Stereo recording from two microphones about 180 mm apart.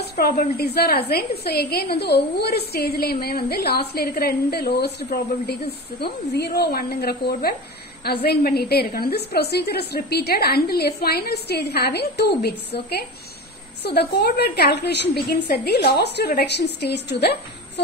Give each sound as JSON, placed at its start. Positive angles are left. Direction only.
{"t": 0.0, "sound": "a woman's voice", "side_deg": 60}